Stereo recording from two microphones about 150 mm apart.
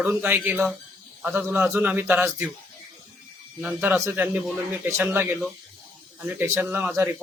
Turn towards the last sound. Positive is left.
turn(degrees=-15)  # may be behind; listen again after turning